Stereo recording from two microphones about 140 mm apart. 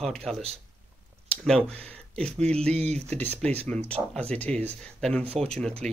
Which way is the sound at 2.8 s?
50° right (ahead or behind).